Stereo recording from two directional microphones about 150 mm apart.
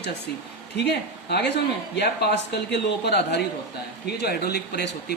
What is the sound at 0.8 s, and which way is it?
Speech, 90° left.